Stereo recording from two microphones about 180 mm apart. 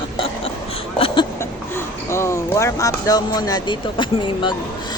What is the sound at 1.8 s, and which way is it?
Speech, 15° left (ahead or behind).